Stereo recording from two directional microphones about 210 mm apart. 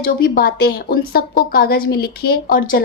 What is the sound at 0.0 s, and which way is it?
A woman's voice, 45° left (ahead or behind).